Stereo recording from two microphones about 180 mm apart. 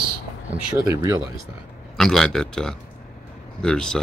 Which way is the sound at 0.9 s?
20° right (ahead or behind).